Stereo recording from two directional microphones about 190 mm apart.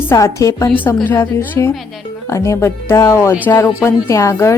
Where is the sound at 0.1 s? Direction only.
15° left (ahead or behind).